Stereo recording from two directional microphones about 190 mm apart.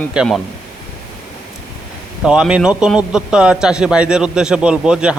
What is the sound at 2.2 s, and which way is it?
A man's voice, 5° right (ahead or behind).